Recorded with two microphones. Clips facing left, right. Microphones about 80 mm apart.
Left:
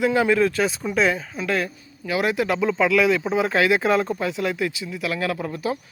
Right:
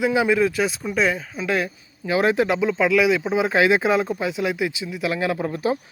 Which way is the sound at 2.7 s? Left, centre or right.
Centre.